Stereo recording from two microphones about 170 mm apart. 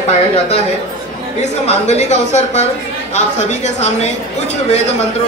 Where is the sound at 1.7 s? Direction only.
40° left (ahead or behind).